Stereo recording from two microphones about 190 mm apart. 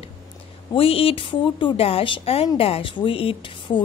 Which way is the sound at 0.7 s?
30° left (ahead or behind).